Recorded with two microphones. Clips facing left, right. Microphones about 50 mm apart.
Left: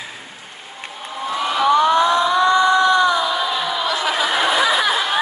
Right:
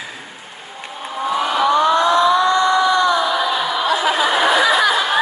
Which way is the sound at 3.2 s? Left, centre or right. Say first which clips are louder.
Right 2 dB; centre.